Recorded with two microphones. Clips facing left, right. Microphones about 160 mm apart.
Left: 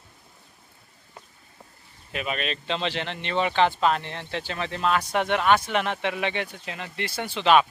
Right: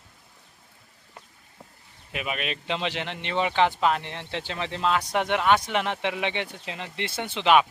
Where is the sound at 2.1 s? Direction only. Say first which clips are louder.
Left 2 dB; 15° right (ahead or behind).